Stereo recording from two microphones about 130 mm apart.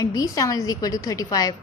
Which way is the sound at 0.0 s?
25° left (ahead or behind).